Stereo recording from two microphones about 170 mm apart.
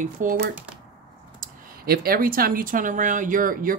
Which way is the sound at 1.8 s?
60° right (ahead or behind).